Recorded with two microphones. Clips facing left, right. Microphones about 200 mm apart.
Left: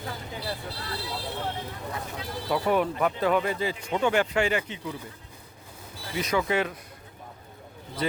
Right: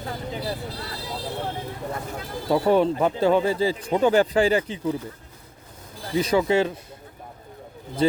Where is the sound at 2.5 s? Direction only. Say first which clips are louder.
Right 6 dB; 30° right (ahead or behind).